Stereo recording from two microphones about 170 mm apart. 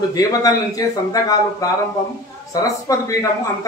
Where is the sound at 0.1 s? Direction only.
20° left (ahead or behind).